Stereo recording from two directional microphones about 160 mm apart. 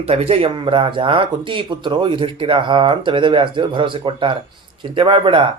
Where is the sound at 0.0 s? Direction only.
40° right (ahead or behind).